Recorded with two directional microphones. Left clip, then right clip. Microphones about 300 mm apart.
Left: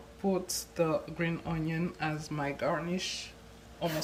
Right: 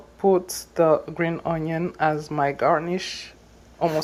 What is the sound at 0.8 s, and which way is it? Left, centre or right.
Speech, right.